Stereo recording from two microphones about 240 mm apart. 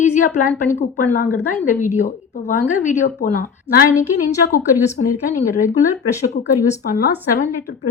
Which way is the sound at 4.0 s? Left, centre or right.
Centre.